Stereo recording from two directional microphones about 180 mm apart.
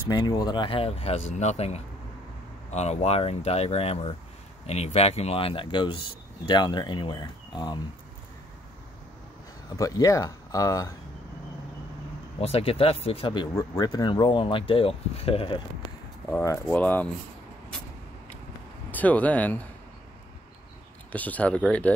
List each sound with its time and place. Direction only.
0.1 s speech: 20° left (ahead or behind)
9.8 s speech: 20° left (ahead or behind)
12.4 s speech: 35° left (ahead or behind)
16.3 s speech: 10° left (ahead or behind)
18.9 s speech: 10° left (ahead or behind)
21.1 s speech: 10° left (ahead or behind)